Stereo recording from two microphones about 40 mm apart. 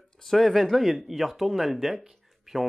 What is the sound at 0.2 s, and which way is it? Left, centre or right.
Speech, centre.